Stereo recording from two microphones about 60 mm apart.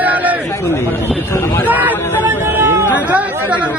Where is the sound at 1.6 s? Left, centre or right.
Right.